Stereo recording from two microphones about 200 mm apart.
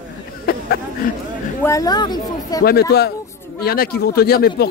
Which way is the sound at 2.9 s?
55° left (ahead or behind).